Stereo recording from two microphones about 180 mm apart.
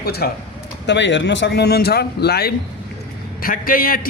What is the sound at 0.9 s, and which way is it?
Speech, 85° left.